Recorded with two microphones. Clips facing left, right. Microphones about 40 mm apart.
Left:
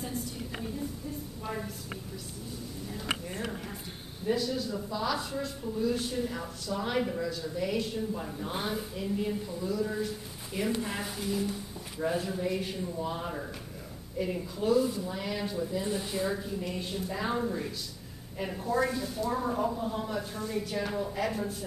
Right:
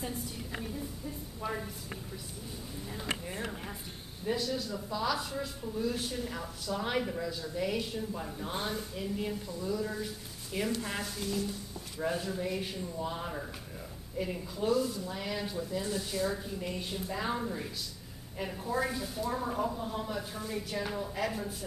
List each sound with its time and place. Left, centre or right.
1.4 s a sound: centre
2.9 s a sound: centre
4.3 s speech: centre
9.7 s speech: centre
10.8 s speech: centre
15.1 s speech: centre
15.8 s speech: centre
16.4 s speech: centre